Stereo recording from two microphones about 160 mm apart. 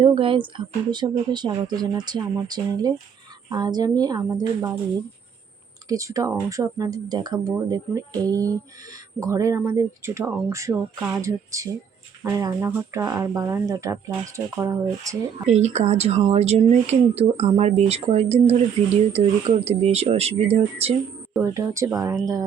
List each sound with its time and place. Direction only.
0.0 s speech: 30° right (ahead or behind)
5.9 s speech: 20° right (ahead or behind)
15.4 s speech: 45° right (ahead or behind)
21.4 s speech: 20° right (ahead or behind)